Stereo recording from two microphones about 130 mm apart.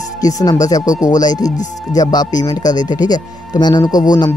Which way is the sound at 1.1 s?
30° left (ahead or behind).